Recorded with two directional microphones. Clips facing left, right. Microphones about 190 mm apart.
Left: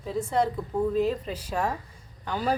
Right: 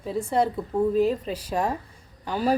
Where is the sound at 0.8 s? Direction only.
10° right (ahead or behind).